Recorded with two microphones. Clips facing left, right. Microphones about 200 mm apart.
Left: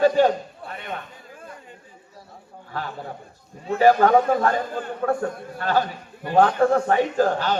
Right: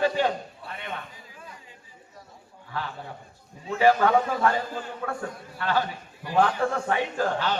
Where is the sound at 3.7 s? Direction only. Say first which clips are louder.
Left 4 dB; 40° left (ahead or behind).